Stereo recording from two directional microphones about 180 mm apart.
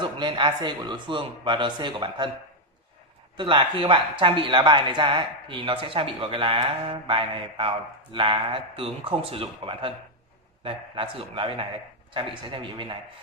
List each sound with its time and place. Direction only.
0.0 s speech: 25° right (ahead or behind)
3.3 s speech: 25° right (ahead or behind)